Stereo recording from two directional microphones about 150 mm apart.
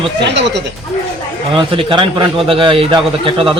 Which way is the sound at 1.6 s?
35° right (ahead or behind).